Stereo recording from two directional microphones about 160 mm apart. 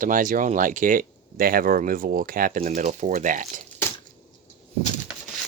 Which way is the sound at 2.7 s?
50° right (ahead or behind).